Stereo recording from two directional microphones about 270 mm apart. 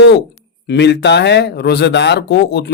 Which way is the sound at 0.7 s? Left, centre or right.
Left.